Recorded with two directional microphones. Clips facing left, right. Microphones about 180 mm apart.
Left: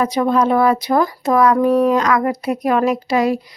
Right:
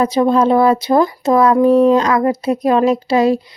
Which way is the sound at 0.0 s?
30° right (ahead or behind).